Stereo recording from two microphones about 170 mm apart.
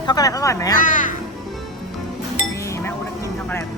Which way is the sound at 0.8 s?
50° left (ahead or behind).